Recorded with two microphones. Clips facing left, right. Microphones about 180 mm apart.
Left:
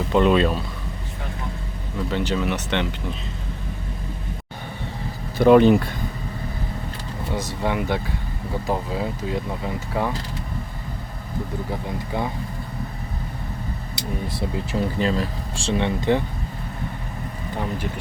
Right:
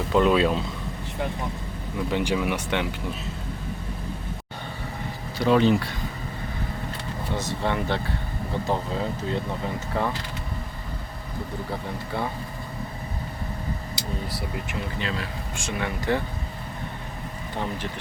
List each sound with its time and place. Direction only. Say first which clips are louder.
0.1 s speech: left 2 dB; centre (ahead or behind)
2.0 s speech: left 1 dB; 15° right (ahead or behind)
5.4 s speech: left 6 dB; 55° left (ahead or behind)
7.3 s speech: left 2 dB; 15° left (ahead or behind)
11.7 s speech: left 2 dB; 15° left (ahead or behind)
14.3 s speech: left 6 dB; 30° left (ahead or behind)